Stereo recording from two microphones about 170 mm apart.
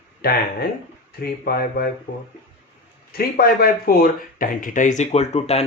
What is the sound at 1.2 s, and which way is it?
Speech, 65° left (ahead or behind).